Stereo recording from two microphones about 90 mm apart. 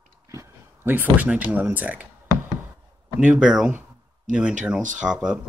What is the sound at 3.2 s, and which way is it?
Speech, 10° right (ahead or behind).